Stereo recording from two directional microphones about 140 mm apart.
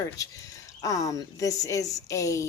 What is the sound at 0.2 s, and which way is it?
Speech, 25° left (ahead or behind).